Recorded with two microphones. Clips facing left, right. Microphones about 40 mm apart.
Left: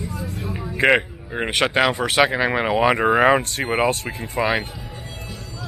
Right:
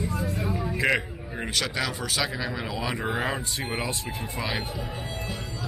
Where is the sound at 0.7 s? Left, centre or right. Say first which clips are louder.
Left 9 dB; left.